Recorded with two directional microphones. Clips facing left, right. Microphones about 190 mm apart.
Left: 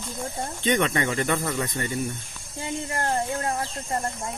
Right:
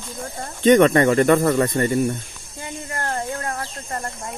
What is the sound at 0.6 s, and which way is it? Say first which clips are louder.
Speech: right 11 dB; 45° right (ahead or behind).